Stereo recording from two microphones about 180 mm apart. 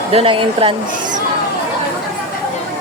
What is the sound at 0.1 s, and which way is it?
Speech, 30° right (ahead or behind).